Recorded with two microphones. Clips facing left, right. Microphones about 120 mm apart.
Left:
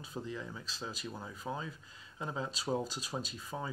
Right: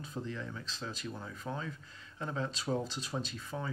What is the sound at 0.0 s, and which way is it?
Speech, 10° left (ahead or behind).